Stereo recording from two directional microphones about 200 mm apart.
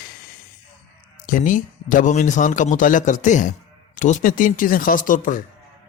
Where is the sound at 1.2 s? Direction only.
40° left (ahead or behind).